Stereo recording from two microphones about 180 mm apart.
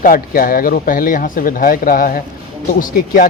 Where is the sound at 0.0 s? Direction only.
50° left (ahead or behind).